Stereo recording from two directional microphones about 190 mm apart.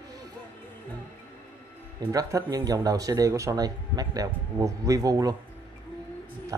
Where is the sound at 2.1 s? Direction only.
20° right (ahead or behind).